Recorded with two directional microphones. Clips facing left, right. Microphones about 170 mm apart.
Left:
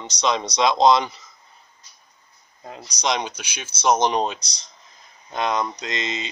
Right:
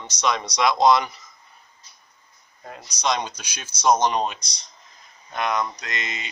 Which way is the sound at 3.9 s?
25° left (ahead or behind).